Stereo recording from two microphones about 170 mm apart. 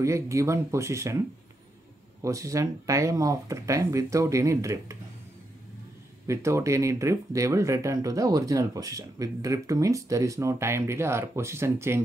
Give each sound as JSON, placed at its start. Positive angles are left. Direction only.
{"t": 0.0, "sound": "speech", "side_deg": -15}
{"t": 2.2, "sound": "speech", "side_deg": -20}
{"t": 6.2, "sound": "speech", "side_deg": -15}